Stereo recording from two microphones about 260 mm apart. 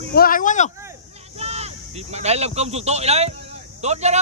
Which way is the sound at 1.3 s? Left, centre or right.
Right.